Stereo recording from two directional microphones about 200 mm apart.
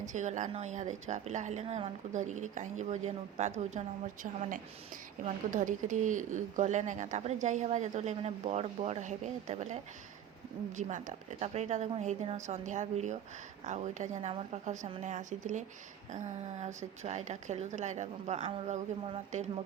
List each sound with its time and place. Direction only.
0.0 s speech: 40° right (ahead or behind)